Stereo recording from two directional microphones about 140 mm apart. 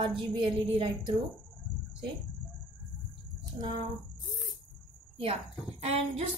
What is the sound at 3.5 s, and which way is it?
Speech, 35° right (ahead or behind).